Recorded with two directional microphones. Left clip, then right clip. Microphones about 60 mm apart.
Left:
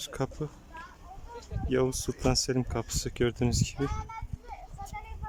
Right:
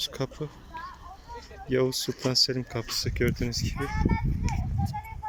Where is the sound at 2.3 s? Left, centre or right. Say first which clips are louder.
Right 4 dB; left.